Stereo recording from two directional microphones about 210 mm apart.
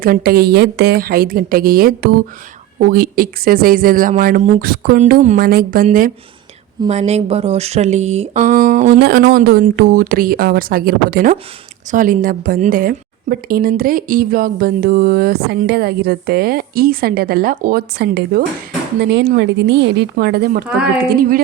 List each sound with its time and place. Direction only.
0.0 s a woman's voice: 45° right (ahead or behind)
9.0 s a woman's voice: 50° right (ahead or behind)